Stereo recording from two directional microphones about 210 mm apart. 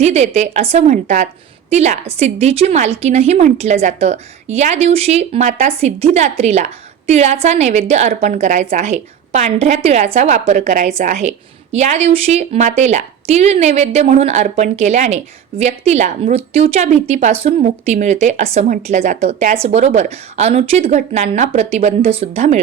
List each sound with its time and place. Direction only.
0.0 s a woman's voice: 30° right (ahead or behind)